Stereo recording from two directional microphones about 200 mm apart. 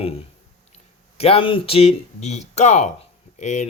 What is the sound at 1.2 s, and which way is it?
Speech, 30° left (ahead or behind).